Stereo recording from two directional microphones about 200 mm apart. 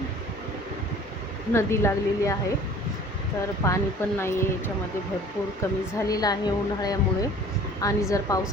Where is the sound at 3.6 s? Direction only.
15° left (ahead or behind).